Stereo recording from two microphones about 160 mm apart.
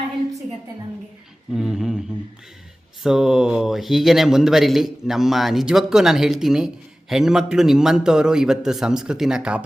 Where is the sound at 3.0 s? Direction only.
5° right (ahead or behind).